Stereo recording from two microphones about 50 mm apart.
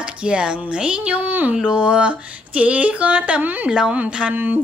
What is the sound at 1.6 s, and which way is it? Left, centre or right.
Speech, centre.